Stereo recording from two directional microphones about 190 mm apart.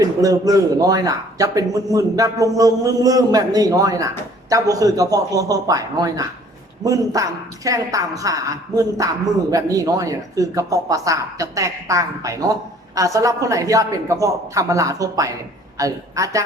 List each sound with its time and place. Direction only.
0.0 s a woman's voice: 20° right (ahead or behind)